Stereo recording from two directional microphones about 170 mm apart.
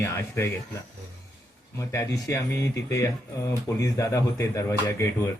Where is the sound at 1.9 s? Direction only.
15° left (ahead or behind).